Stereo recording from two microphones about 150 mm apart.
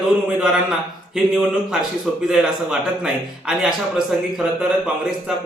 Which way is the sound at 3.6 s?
5° right (ahead or behind).